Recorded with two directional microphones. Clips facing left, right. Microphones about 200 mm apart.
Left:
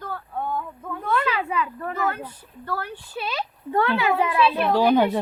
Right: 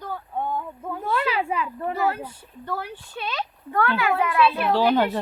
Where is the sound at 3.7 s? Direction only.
25° left (ahead or behind).